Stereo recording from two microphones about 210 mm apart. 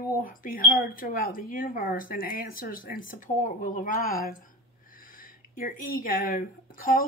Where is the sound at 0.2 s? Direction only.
40° left (ahead or behind).